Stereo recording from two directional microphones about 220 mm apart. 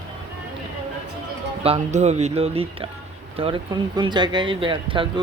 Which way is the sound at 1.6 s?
30° right (ahead or behind).